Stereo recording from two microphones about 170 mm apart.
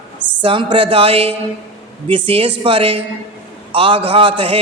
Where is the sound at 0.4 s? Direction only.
30° right (ahead or behind).